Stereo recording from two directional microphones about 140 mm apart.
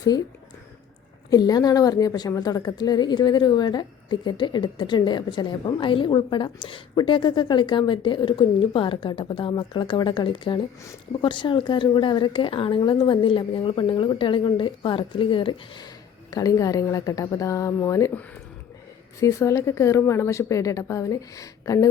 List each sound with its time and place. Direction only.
0.1 s speech: 30° left (ahead or behind)
1.3 s a woman's voice: 30° left (ahead or behind)
16.3 s speech: 25° left (ahead or behind)
19.2 s speech: 20° left (ahead or behind)